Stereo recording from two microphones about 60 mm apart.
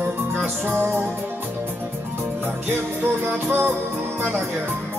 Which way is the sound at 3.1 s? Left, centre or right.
Right.